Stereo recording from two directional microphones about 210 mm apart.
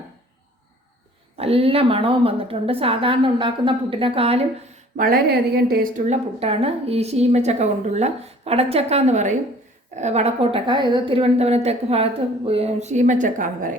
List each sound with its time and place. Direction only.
1.4 s a woman's voice: 30° right (ahead or behind)
4.9 s speech: 45° right (ahead or behind)
6.1 s a woman's voice: 30° right (ahead or behind)